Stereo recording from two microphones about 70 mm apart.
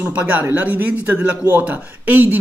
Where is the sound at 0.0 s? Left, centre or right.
Right.